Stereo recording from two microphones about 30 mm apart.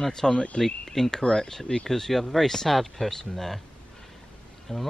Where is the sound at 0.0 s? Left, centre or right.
Centre.